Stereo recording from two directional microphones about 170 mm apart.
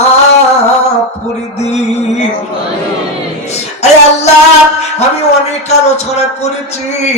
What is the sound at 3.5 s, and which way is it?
Music, 40° left (ahead or behind).